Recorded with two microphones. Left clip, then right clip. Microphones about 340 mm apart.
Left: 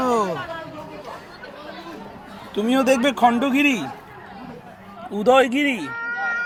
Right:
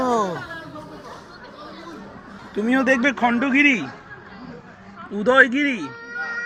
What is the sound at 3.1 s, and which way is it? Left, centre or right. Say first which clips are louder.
Speech: left 4 dB; centre.